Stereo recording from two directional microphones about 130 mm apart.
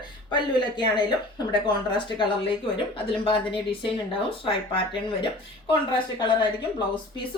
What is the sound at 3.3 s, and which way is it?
Speech, 40° left (ahead or behind).